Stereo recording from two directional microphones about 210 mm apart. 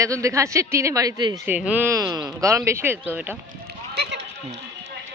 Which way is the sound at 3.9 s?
55° right (ahead or behind).